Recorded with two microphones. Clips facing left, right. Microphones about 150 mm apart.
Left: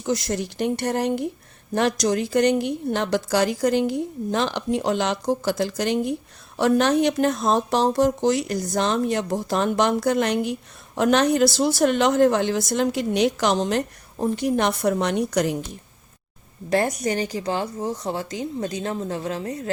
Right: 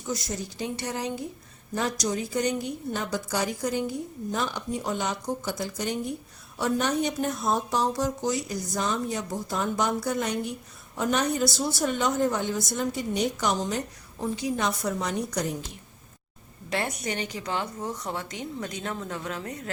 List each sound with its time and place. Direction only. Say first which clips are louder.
0.0 s a woman's voice: left 8 dB; 75° left (ahead or behind)
14.3 s a woman's voice: left 6 dB; 65° left (ahead or behind); by 15.5 s 80° left
16.6 s a woman's voice: left 8 dB; 40° left (ahead or behind)